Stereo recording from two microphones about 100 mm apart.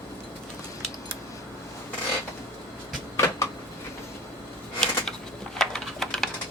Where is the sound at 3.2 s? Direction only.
30° left (ahead or behind).